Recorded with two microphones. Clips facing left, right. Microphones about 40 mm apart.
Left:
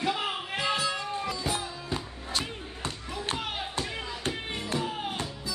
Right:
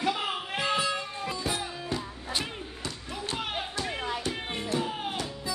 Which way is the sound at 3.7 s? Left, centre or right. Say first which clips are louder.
Right 2 dB; left.